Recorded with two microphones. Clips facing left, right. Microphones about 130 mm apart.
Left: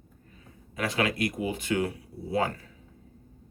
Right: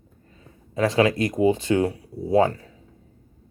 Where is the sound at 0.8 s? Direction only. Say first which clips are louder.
Right 8 dB; 35° right (ahead or behind).